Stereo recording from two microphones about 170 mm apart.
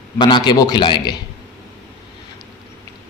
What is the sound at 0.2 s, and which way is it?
Speech, 25° left (ahead or behind).